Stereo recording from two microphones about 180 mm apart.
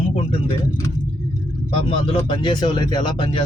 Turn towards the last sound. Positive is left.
turn(degrees=25)  # may be behind; listen again after turning